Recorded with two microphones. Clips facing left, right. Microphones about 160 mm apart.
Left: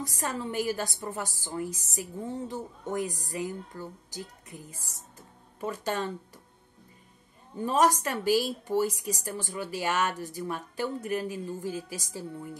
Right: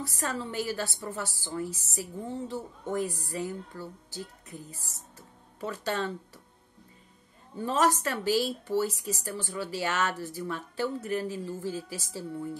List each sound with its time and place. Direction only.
0.0 s a woman's voice: 15° left (ahead or behind)
5.6 s a woman's voice: 15° left (ahead or behind)
7.5 s a woman's voice: 10° left (ahead or behind)